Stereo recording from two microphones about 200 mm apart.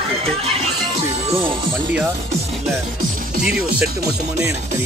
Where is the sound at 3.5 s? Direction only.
50° right (ahead or behind).